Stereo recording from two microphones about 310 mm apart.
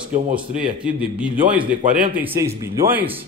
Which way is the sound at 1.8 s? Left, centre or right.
Centre.